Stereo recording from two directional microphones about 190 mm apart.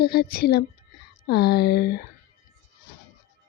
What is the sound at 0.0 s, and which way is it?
Speech, 55° left (ahead or behind).